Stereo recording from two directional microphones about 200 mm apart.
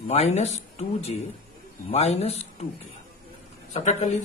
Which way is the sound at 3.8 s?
35° left (ahead or behind).